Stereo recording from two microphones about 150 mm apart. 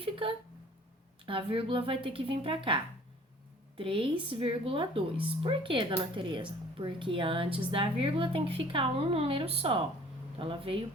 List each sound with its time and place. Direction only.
0.2 s a woman's voice: 35° right (ahead or behind)